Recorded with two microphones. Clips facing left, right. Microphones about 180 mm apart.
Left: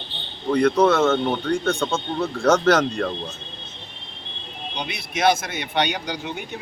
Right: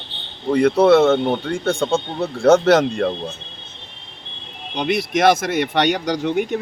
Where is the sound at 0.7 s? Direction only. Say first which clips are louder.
Right 5 dB; 30° right (ahead or behind).